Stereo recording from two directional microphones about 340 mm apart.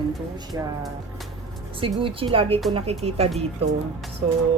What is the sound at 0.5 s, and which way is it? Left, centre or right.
Speech, centre.